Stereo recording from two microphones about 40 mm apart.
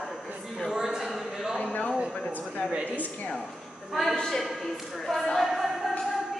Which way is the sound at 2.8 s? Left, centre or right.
Left.